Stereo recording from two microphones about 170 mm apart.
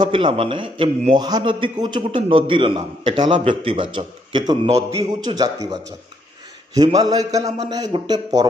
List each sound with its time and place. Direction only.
0.0 s a man's voice: 30° right (ahead or behind)
6.7 s a man's voice: 20° right (ahead or behind)